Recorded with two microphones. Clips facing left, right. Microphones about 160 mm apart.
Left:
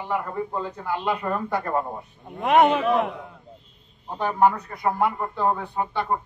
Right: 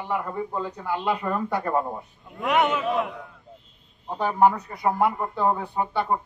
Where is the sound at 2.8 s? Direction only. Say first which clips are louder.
Left 3 dB; 60° left (ahead or behind).